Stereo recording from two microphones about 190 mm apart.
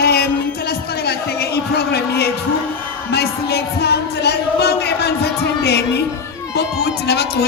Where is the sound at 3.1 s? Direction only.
60° left (ahead or behind).